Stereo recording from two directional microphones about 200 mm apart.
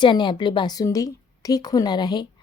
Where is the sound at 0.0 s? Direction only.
25° left (ahead or behind).